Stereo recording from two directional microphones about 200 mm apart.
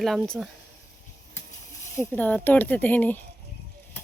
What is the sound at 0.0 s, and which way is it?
Speech, centre (ahead or behind).